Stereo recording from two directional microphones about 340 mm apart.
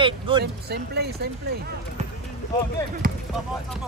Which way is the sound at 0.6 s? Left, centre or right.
Right.